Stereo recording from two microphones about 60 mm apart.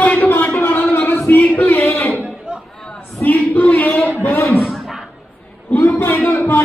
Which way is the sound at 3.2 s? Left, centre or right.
Left.